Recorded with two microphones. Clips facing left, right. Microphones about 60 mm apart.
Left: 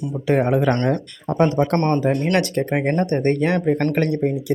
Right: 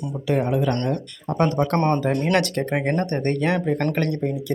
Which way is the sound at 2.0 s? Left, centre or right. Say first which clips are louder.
Left 2 dB; centre.